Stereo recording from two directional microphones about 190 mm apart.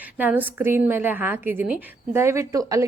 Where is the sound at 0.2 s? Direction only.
10° right (ahead or behind).